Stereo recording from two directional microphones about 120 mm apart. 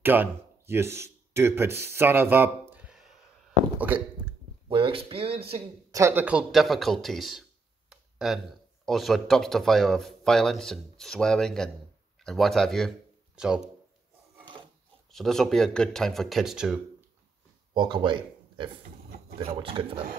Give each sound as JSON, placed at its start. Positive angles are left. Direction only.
{"t": 0.0, "sound": "speech", "side_deg": -15}
{"t": 4.6, "sound": "speech", "side_deg": -45}
{"t": 5.9, "sound": "speech", "side_deg": -25}
{"t": 6.2, "sound": "speech", "side_deg": -5}
{"t": 7.9, "sound": "a sound", "side_deg": -5}
{"t": 8.8, "sound": "speech", "side_deg": 0}
{"t": 15.0, "sound": "speech", "side_deg": 5}
{"t": 17.7, "sound": "speech", "side_deg": -40}